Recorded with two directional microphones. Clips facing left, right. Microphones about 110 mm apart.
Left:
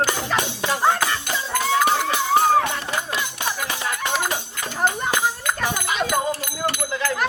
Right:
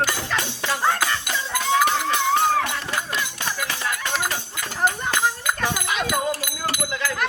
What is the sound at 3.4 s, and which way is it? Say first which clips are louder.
Music: left 1 dB; 15° left (ahead or behind).